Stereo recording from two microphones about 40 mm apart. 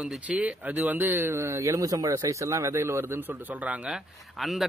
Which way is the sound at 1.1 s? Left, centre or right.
Right.